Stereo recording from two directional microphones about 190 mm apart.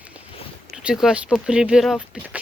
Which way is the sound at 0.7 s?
5° right (ahead or behind).